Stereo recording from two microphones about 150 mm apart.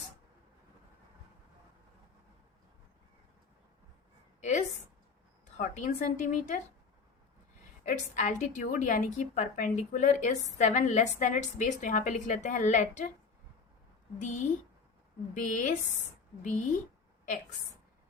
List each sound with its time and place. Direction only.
4.4 s a sound: 55° left (ahead or behind)
5.5 s a woman's voice: 60° left (ahead or behind)
8.1 s a woman's voice: 55° left (ahead or behind)
14.2 s a woman's voice: 55° left (ahead or behind)
15.4 s a woman's voice: 60° left (ahead or behind)